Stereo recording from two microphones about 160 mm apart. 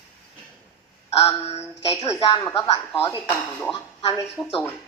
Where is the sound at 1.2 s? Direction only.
35° left (ahead or behind).